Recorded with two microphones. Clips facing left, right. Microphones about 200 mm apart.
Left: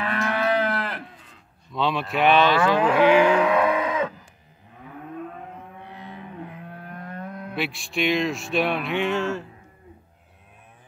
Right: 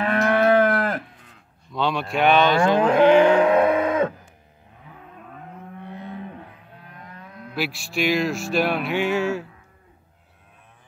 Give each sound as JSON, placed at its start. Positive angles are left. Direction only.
{"t": 0.0, "sound": "moo", "side_deg": -50}
{"t": 1.7, "sound": "speech", "side_deg": 0}
{"t": 3.5, "sound": "a sound", "side_deg": -50}
{"t": 6.7, "sound": "livestock", "side_deg": 55}
{"t": 7.5, "sound": "speech", "side_deg": 0}